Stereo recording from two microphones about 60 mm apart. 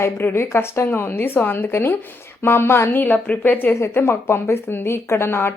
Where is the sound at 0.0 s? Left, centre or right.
Left.